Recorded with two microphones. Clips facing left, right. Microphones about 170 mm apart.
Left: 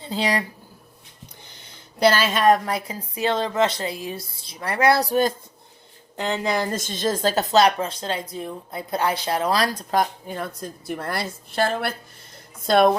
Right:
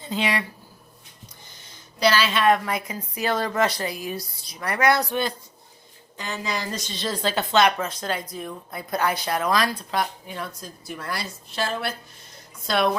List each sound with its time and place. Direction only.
0.0 s speech: 35° left (ahead or behind)
1.5 s speech: 60° left (ahead or behind); by 5.3 s 40° left (ahead or behind)
6.1 s speech: 60° left (ahead or behind)